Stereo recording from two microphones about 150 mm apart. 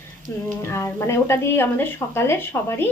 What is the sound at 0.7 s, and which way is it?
Speech, 20° left (ahead or behind).